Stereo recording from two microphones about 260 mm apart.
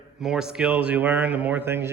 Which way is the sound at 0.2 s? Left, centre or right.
Centre.